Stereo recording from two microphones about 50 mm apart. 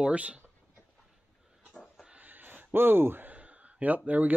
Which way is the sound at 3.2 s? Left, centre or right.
Right.